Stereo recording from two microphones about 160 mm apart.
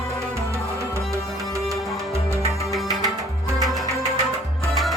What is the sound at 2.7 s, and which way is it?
Music, centre (ahead or behind).